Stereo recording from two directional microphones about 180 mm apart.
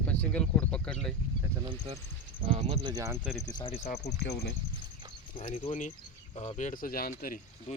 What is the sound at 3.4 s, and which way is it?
Speech, 25° left (ahead or behind).